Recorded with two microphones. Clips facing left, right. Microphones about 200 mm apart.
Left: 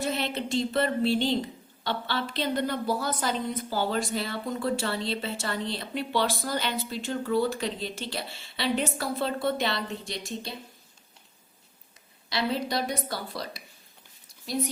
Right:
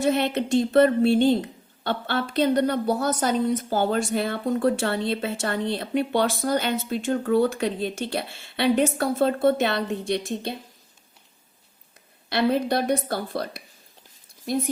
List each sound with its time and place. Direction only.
0.0 s a woman's voice: 55° right (ahead or behind)
12.3 s a woman's voice: 55° right (ahead or behind)